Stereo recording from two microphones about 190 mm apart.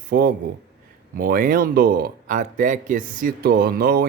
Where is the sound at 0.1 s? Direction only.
50° right (ahead or behind).